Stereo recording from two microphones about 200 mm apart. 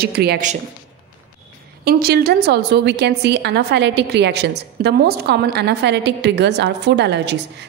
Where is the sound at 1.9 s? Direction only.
50° right (ahead or behind).